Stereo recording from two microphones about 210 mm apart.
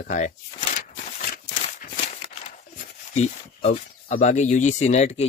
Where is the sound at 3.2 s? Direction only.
35° left (ahead or behind).